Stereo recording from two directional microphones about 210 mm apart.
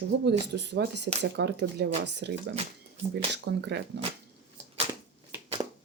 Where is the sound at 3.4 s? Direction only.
55° right (ahead or behind).